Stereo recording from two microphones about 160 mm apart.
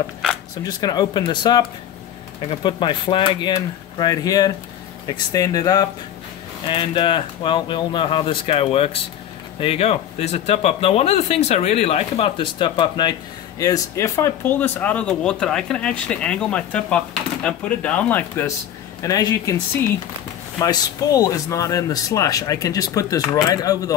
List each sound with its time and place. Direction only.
0.7 s speech: 25° left (ahead or behind)
19.0 s speech: 20° left (ahead or behind)
20.5 s speech: 20° left (ahead or behind)